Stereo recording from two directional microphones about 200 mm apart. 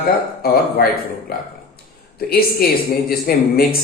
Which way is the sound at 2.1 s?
50° left (ahead or behind).